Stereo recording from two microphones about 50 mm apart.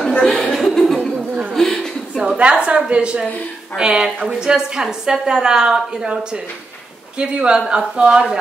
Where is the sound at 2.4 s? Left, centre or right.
Right.